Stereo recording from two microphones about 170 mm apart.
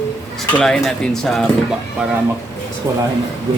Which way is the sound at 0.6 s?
5° left (ahead or behind).